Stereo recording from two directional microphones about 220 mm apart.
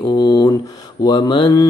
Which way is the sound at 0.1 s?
20° left (ahead or behind).